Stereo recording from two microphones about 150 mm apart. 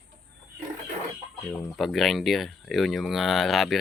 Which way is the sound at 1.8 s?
Centre (ahead or behind).